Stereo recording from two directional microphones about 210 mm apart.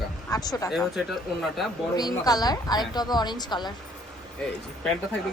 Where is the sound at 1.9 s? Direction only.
20° left (ahead or behind).